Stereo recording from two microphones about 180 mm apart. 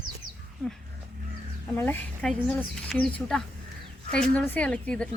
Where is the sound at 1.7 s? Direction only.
10° left (ahead or behind).